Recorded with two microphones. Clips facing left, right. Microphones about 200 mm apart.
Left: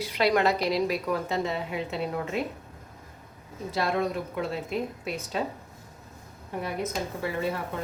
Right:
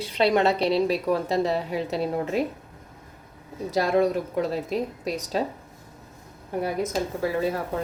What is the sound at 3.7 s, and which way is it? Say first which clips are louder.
A woman's voice: right 6 dB; 40° right (ahead or behind).